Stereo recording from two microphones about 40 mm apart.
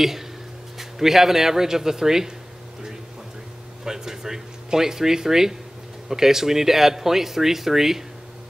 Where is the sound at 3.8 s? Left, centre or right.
Centre.